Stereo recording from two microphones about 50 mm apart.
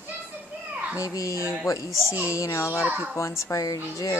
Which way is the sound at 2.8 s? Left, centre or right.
Right.